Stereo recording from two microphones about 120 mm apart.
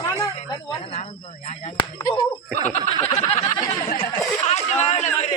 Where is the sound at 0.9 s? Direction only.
70° left (ahead or behind).